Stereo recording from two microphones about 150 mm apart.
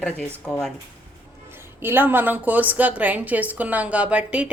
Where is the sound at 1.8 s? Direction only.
15° right (ahead or behind).